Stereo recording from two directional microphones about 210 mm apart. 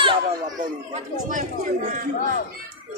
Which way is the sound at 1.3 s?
40° right (ahead or behind).